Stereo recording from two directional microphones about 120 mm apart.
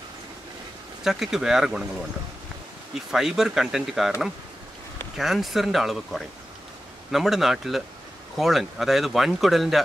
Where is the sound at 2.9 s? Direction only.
5° right (ahead or behind).